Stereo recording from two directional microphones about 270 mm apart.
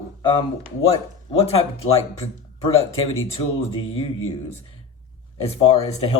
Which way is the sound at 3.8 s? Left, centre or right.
Left.